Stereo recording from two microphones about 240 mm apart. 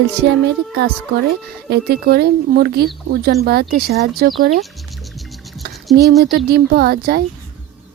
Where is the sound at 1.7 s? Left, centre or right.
Right.